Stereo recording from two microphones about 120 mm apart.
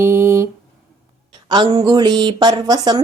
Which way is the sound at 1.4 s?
40° right (ahead or behind).